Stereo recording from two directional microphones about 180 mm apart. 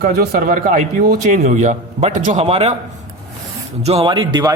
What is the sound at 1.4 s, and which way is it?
Speech, 40° right (ahead or behind).